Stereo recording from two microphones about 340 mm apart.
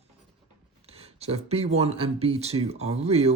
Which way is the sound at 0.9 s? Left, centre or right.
Centre.